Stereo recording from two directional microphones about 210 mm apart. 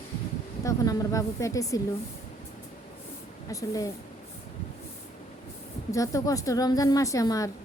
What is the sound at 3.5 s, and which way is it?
Speech, 15° left (ahead or behind).